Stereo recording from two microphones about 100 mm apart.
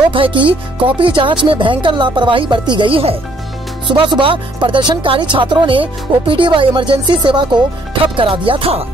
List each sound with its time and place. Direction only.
0.1 s speech: 60° right (ahead or behind)
3.8 s speech: 55° right (ahead or behind)
8.2 s music: 60° right (ahead or behind)